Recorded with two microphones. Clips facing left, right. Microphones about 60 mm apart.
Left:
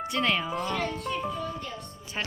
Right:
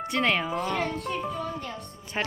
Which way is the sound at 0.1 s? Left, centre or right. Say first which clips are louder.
Right 2 dB; right.